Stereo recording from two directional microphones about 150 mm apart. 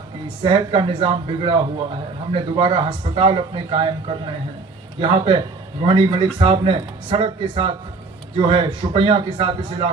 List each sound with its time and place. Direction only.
0.4 s speech: 35° right (ahead or behind)
4.9 s speech: 35° right (ahead or behind)